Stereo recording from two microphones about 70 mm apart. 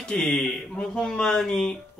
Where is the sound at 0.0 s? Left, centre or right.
Centre.